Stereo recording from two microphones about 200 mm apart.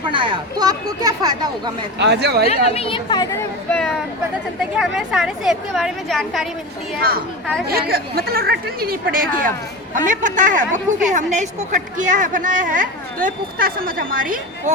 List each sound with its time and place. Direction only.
0.1 s speech: 25° right (ahead or behind)
2.0 s speech: 55° right (ahead or behind)
2.6 s speech: 30° left (ahead or behind)
3.7 s a woman's voice: 5° left (ahead or behind)
7.7 s a woman's voice: 50° right (ahead or behind)